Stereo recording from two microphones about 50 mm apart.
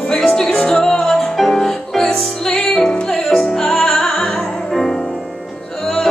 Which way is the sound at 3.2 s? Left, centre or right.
Centre.